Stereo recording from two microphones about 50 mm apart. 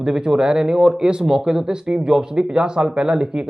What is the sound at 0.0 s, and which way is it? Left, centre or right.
A man's voice, centre.